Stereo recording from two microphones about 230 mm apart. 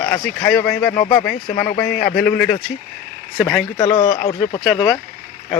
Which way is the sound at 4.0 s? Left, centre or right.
Left.